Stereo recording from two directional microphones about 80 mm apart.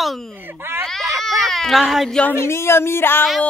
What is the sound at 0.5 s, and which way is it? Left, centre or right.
Baby cry, right.